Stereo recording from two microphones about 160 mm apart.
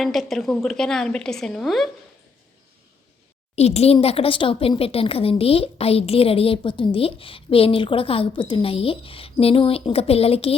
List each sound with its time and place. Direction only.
0.0 s a woman's voice: centre (ahead or behind)
3.5 s a child's voice: 40° left (ahead or behind)